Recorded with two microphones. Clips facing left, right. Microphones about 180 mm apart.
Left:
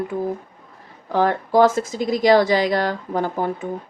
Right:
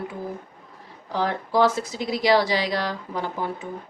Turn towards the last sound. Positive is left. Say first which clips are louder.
# left 6 dB
turn(degrees=50)  # may be behind; listen again after turning